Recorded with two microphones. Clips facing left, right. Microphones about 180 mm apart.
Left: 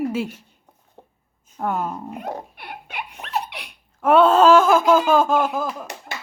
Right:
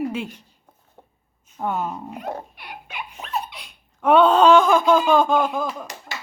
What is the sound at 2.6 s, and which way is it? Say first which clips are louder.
Laughter: left 2 dB; 60° left (ahead or behind).